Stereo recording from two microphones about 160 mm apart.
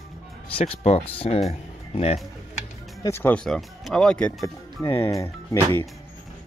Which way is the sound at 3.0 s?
15° left (ahead or behind).